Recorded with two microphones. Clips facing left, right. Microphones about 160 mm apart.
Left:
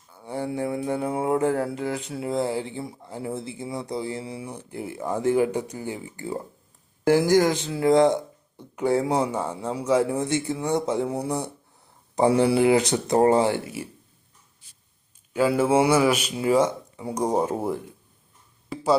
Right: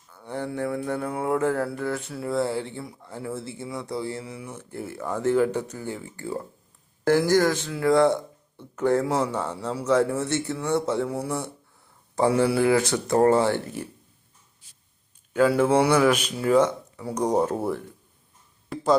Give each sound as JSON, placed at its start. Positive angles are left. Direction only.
{"t": 0.1, "sound": "speech", "side_deg": 10}
{"t": 4.3, "sound": "speech", "side_deg": 30}
{"t": 4.5, "sound": "speech", "side_deg": 15}
{"t": 15.3, "sound": "speech", "side_deg": 10}